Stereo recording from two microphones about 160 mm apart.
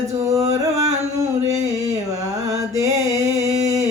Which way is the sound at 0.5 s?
20° right (ahead or behind).